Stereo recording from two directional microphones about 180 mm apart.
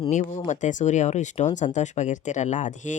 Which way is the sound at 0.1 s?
45° left (ahead or behind).